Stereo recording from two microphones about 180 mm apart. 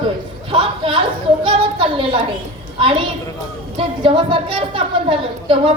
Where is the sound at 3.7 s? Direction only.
30° right (ahead or behind).